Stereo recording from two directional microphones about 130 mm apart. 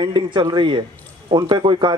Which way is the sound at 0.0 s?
35° right (ahead or behind).